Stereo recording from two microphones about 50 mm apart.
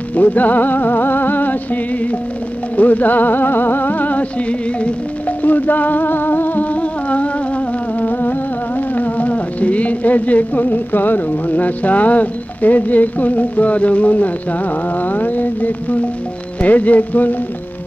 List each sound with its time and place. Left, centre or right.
0.1 s music: left
5.4 s music: left